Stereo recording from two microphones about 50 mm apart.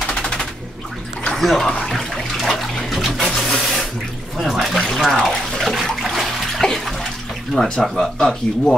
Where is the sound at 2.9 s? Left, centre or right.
Centre.